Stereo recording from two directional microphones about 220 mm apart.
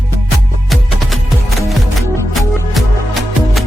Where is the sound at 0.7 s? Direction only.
Centre (ahead or behind).